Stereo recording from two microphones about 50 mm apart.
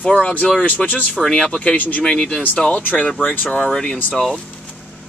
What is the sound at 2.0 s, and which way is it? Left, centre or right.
Speech, centre.